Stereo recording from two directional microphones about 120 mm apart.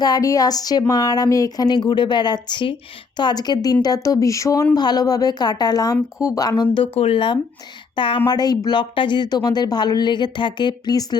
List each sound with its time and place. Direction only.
0.0 s speech: 30° left (ahead or behind)
6.9 s speech: 50° left (ahead or behind)
8.3 s speech: 35° left (ahead or behind)